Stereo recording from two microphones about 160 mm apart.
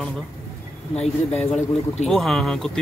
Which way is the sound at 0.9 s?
40° left (ahead or behind).